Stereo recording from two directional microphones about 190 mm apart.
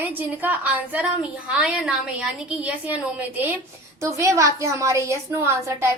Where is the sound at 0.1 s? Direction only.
10° right (ahead or behind).